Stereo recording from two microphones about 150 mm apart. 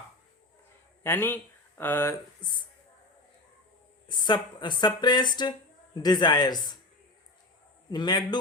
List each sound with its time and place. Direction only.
1.0 s speech: 15° left (ahead or behind)
2.4 s speech: 30° left (ahead or behind)
4.1 s speech: 30° left (ahead or behind)
7.9 s speech: 25° left (ahead or behind)